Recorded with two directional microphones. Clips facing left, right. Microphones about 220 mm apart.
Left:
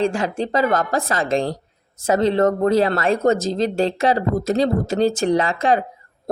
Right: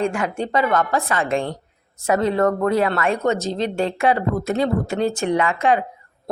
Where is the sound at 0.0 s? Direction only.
35° left (ahead or behind).